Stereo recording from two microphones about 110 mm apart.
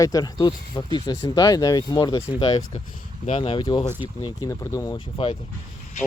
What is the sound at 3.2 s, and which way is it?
Speech, 65° left (ahead or behind).